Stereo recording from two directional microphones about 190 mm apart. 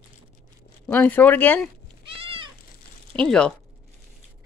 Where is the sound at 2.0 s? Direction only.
30° right (ahead or behind).